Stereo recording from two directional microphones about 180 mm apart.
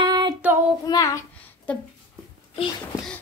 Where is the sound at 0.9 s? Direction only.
15° left (ahead or behind).